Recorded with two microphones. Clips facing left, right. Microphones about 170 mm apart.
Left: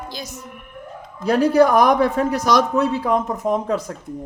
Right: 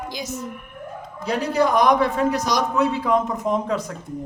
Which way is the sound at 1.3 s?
60° left (ahead or behind).